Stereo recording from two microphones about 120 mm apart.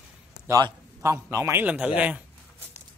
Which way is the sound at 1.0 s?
25° right (ahead or behind).